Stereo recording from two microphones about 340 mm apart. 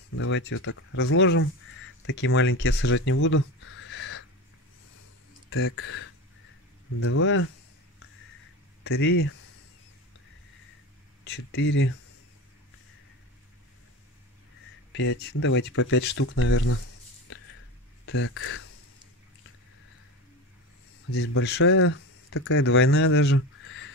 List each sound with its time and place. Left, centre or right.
0.1 s speech: left
5.5 s speech: left
8.8 s speech: left
11.3 s speech: left
14.9 s speech: left
18.0 s speech: left
21.1 s speech: left